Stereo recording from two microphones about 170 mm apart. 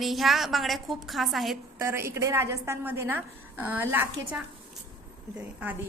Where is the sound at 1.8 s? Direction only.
15° right (ahead or behind).